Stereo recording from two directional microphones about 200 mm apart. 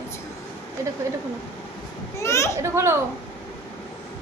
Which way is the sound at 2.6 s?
15° right (ahead or behind).